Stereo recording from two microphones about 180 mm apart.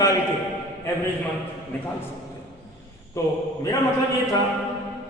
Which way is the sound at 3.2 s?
15° left (ahead or behind).